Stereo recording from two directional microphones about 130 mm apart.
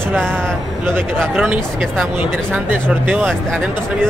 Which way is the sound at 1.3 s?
10° right (ahead or behind).